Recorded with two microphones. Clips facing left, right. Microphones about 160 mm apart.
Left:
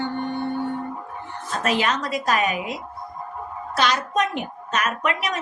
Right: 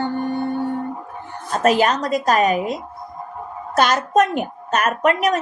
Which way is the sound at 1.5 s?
45° right (ahead or behind).